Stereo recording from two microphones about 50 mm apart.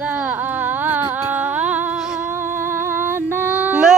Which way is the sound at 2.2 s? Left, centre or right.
Right.